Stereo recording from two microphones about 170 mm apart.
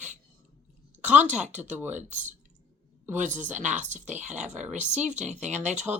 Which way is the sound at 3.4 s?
45° right (ahead or behind).